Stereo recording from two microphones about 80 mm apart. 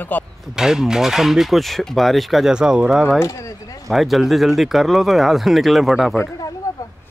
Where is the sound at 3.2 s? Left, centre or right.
Left.